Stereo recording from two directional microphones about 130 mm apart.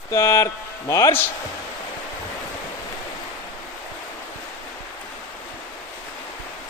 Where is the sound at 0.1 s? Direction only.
20° left (ahead or behind).